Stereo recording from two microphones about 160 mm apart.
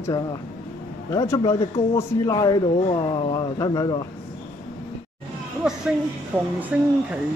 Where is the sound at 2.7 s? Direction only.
35° left (ahead or behind).